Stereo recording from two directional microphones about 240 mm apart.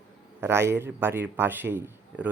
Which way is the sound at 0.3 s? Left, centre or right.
Centre.